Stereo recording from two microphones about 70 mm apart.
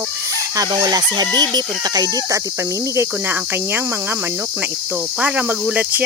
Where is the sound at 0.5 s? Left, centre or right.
Right.